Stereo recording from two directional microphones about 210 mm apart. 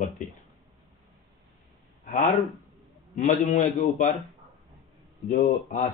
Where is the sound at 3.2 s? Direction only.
40° left (ahead or behind).